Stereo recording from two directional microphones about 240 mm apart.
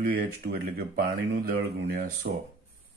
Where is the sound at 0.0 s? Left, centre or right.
Right.